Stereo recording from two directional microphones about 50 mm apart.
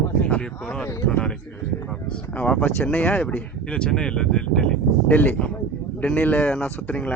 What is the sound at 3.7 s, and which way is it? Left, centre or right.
Speech, centre.